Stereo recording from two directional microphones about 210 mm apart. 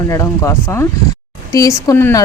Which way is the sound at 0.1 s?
15° left (ahead or behind).